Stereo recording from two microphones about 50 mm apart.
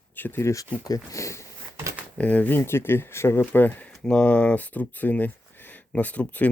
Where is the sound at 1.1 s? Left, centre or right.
Left.